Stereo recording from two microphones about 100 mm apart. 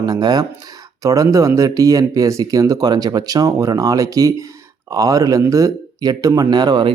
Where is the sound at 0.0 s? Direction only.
40° right (ahead or behind).